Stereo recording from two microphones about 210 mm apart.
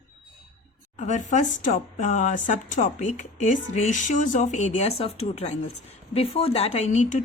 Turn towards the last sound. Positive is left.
turn(degrees=35)  # may be behind; listen again after turning